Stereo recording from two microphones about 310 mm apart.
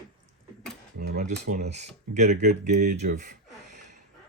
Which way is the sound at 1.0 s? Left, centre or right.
Right.